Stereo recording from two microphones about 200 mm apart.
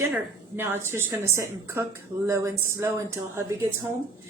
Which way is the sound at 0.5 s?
10° right (ahead or behind).